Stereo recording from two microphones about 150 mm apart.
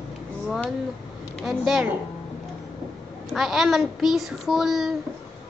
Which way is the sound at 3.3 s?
Centre (ahead or behind).